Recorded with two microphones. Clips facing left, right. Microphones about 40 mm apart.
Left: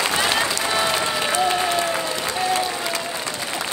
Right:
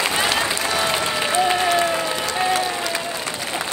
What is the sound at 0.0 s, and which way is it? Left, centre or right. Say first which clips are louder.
Applause: even; centre.